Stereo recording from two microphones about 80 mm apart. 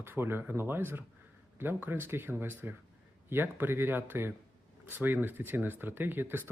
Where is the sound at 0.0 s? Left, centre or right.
Right.